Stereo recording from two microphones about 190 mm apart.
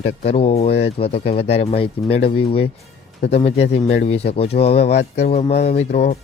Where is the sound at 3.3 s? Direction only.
35° left (ahead or behind).